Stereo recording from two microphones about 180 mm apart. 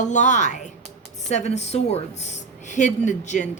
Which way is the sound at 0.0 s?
40° left (ahead or behind).